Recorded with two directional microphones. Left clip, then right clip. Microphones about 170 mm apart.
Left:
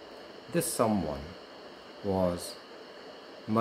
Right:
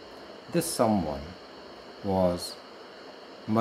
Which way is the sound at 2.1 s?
5° left (ahead or behind).